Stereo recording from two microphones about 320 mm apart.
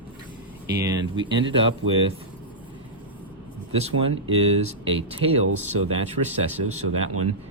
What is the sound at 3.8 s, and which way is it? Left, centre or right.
Speech, centre.